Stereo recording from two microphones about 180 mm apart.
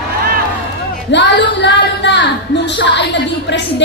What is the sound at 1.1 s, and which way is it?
Speech, 75° left (ahead or behind).